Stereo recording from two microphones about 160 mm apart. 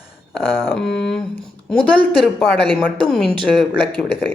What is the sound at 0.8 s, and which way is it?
Speech, 5° left (ahead or behind).